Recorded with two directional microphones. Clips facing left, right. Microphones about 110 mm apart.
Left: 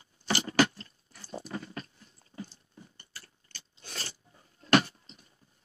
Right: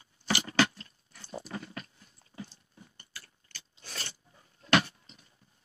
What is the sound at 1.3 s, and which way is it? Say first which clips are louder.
Dog: left 1 dB; 30° left (ahead or behind).